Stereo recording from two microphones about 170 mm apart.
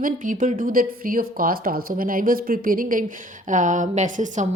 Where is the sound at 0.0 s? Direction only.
50° right (ahead or behind).